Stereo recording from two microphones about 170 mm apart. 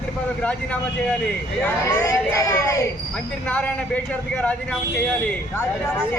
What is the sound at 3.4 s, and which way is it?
Speech, 10° left (ahead or behind).